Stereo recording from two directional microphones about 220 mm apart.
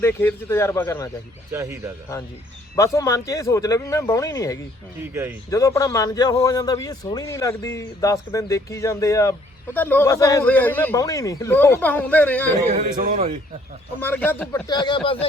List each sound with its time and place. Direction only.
0.0 s a man's voice: 10° left (ahead or behind)
1.5 s speech: 10° right (ahead or behind)
2.7 s a man's voice: 15° left (ahead or behind)
12.7 s a man's voice: 40° right (ahead or behind)
14.0 s a man's voice: 10° left (ahead or behind)